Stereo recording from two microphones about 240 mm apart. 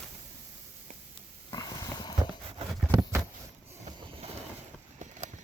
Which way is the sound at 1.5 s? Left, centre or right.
Centre.